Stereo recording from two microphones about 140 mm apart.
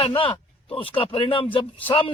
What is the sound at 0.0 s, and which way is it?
A man's voice, 40° left (ahead or behind).